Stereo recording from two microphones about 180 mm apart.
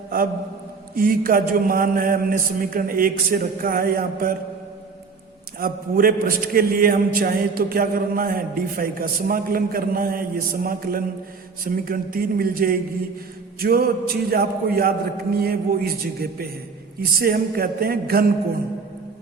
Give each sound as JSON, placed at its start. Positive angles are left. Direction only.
{"t": 0.9, "sound": "a man's voice", "side_deg": -50}
{"t": 5.5, "sound": "a man's voice", "side_deg": -55}